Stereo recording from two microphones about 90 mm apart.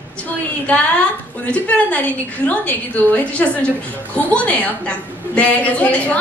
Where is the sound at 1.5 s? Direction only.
15° left (ahead or behind).